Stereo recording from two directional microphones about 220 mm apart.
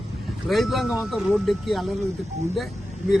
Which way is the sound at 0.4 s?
Centre (ahead or behind).